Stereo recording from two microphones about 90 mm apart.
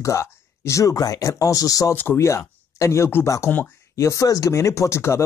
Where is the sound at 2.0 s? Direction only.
30° left (ahead or behind).